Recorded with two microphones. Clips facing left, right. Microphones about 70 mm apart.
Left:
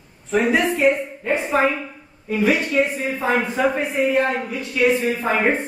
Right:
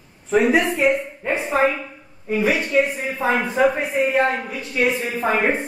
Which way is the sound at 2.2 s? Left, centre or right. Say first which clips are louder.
Left 1 dB; right.